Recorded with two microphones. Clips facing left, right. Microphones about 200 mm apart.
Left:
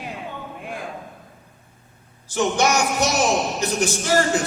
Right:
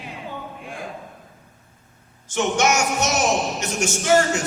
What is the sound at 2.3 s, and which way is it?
A man's voice, 35° left (ahead or behind).